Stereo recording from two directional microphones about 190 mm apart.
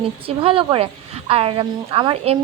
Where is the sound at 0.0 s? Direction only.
30° right (ahead or behind).